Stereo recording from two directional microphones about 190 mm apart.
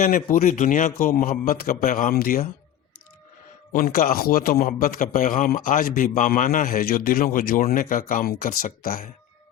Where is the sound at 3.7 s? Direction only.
50° left (ahead or behind).